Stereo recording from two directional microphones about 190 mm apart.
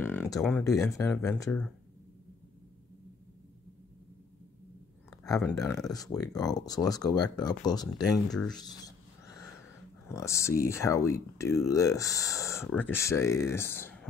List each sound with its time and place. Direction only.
0.0 s speech: 10° left (ahead or behind)
5.2 s speech: 15° left (ahead or behind)
10.0 s speech: 15° left (ahead or behind)